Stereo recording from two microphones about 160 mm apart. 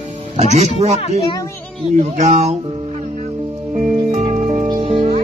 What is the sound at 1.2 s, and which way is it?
Speech, 30° left (ahead or behind).